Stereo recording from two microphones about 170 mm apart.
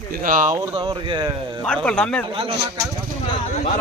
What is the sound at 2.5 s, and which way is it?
Speech, 20° right (ahead or behind).